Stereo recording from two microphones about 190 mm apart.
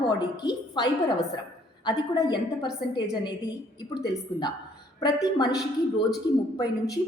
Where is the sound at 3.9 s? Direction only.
20° left (ahead or behind).